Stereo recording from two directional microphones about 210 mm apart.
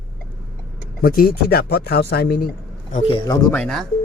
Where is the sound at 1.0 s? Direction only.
45° left (ahead or behind).